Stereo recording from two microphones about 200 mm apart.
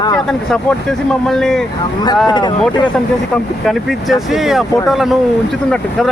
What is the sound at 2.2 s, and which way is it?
Speech, 20° left (ahead or behind).